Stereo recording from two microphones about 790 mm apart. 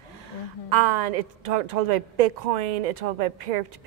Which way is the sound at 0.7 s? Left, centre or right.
Right.